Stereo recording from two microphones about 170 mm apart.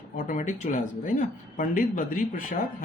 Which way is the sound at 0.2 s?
45° left (ahead or behind).